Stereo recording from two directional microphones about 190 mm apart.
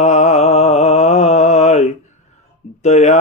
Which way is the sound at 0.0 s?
35° left (ahead or behind).